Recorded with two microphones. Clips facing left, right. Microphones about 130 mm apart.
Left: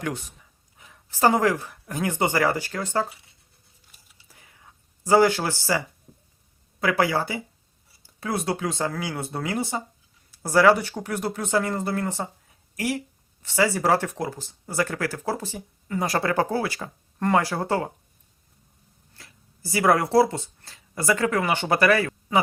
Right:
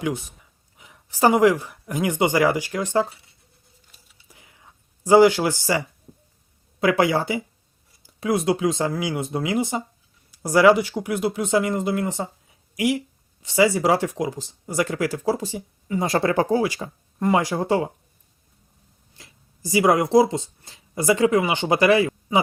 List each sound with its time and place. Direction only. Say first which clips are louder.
0.0 s speech: right 4 dB; 15° right (ahead or behind)
0.8 s a sound: right 2 dB; 15° right (ahead or behind)
1.6 s speech: right 3 dB; 15° right (ahead or behind)
4.3 s a sound: right 2 dB; 20° right (ahead or behind)
5.0 s speech: right 4 dB; 20° right (ahead or behind)
19.1 s speech: right 1 dB; 20° right (ahead or behind)